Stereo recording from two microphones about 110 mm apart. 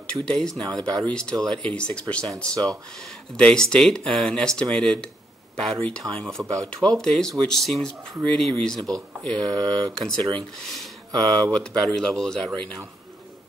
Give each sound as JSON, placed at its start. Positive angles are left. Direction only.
{"t": 0.0, "sound": "speech", "side_deg": 5}
{"t": 9.5, "sound": "speech", "side_deg": -35}
{"t": 9.9, "sound": "speech", "side_deg": 5}